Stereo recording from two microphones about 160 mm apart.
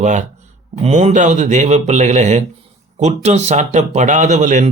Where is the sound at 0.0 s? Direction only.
50° right (ahead or behind).